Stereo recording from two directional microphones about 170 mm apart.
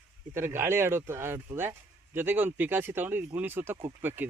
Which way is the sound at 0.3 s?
15° right (ahead or behind).